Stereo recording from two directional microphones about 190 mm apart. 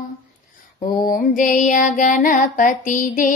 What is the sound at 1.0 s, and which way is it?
Child singing, 45° left (ahead or behind).